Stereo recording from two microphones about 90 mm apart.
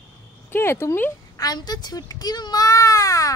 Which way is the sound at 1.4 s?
45° left (ahead or behind).